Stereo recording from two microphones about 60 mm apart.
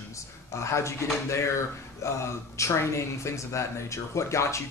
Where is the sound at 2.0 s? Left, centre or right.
Left.